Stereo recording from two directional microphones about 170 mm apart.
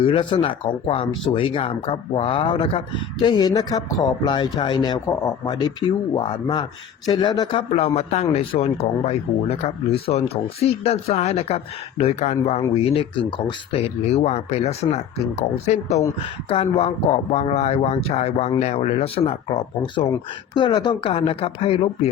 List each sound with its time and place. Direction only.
0.0 s speech: 30° left (ahead or behind)